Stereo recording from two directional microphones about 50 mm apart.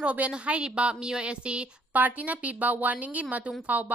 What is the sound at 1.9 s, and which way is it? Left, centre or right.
Speech, right.